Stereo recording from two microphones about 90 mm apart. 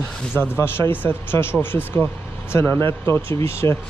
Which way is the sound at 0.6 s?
25° left (ahead or behind).